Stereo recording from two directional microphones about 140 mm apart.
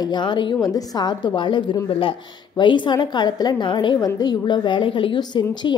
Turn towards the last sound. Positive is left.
turn(degrees=30)  # may be behind; listen again after turning